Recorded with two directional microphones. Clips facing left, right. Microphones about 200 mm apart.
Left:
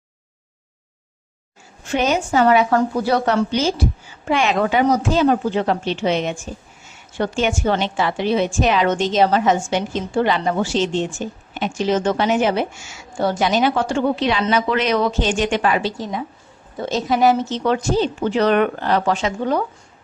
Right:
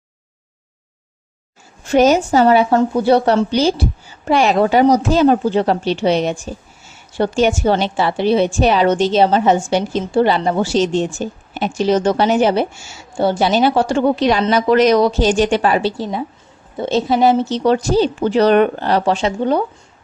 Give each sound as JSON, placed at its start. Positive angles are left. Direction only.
{"t": 1.9, "sound": "a woman's voice", "side_deg": -40}